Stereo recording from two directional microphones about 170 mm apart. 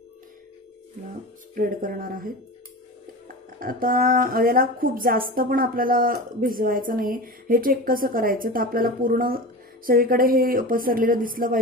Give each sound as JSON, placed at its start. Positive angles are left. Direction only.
{"t": 1.5, "sound": "speech", "side_deg": -55}